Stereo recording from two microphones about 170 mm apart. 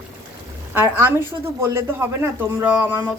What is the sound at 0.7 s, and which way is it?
Speech, 15° right (ahead or behind).